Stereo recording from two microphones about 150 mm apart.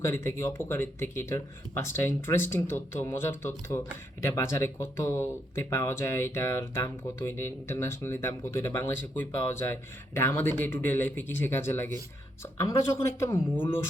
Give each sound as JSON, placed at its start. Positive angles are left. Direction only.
{"t": 0.0, "sound": "speech", "side_deg": 15}